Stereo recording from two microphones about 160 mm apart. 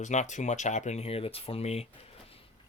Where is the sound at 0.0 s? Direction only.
50° left (ahead or behind).